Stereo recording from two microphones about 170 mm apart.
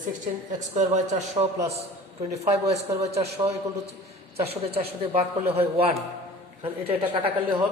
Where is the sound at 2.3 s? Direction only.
40° right (ahead or behind).